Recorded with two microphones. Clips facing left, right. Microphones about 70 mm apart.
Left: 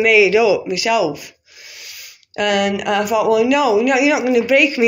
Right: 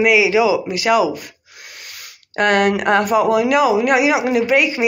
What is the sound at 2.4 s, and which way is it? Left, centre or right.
Speech, right.